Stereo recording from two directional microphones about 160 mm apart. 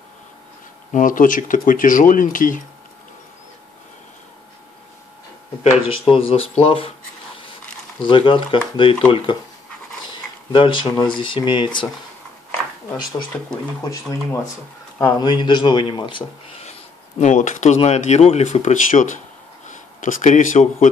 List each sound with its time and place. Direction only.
0.9 s speech: 55° left (ahead or behind)
6.0 s speech: 35° left (ahead or behind)
8.0 s speech: 30° left (ahead or behind)
13.3 s speech: 15° left (ahead or behind); by 16.3 s 30° left (ahead or behind)
17.2 s speech: 50° left (ahead or behind)